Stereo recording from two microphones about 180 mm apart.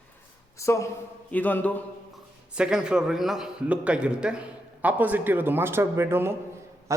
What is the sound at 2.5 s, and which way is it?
A man's voice, 5° right (ahead or behind).